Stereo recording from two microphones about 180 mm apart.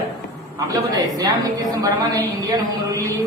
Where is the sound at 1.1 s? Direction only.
20° right (ahead or behind).